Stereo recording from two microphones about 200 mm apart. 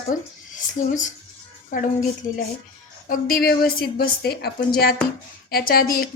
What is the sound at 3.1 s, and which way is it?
A woman's voice, 45° left (ahead or behind).